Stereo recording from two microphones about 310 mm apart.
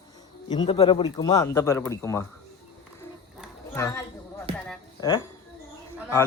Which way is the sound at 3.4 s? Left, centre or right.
Centre.